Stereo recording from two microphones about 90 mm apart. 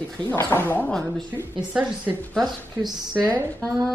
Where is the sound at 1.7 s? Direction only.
15° right (ahead or behind).